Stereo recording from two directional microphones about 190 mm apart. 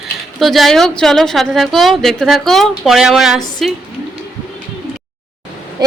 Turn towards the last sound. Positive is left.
turn(degrees=-20)  # may be behind; listen again after turning